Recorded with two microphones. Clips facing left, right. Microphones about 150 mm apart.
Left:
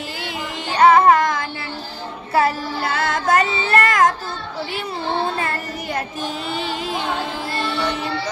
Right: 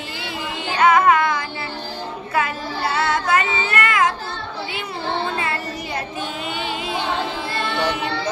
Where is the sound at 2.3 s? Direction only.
35° left (ahead or behind).